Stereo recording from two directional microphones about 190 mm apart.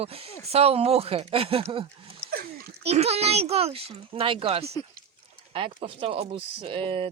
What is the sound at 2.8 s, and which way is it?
Speech, 35° right (ahead or behind).